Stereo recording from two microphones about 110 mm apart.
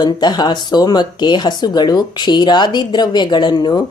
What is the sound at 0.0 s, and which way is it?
Speech, 40° left (ahead or behind).